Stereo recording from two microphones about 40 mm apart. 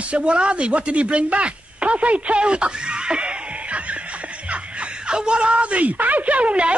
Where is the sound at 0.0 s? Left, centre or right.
Right.